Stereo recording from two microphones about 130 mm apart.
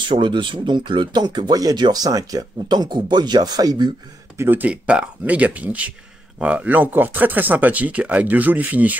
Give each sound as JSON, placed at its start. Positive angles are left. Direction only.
{"t": 0.1, "sound": "speech", "side_deg": -40}
{"t": 4.4, "sound": "speech", "side_deg": -15}